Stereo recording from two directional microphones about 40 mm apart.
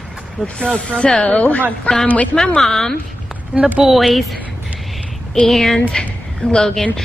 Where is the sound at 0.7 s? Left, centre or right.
Left.